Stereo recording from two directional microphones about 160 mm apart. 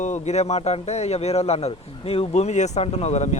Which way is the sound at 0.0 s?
45° left (ahead or behind).